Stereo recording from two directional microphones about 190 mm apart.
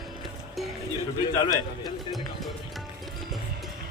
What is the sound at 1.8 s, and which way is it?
Speech, centre (ahead or behind).